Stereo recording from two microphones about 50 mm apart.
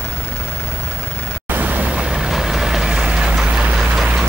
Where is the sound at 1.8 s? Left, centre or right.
Centre.